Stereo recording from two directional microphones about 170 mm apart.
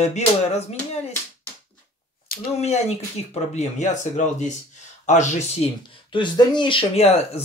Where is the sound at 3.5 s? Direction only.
45° left (ahead or behind).